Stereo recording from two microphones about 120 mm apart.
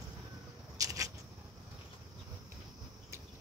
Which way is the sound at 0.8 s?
30° right (ahead or behind).